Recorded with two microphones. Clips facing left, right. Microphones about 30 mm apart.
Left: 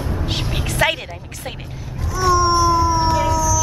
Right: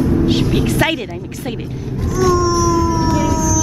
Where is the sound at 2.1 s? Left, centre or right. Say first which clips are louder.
Right 1 dB; left.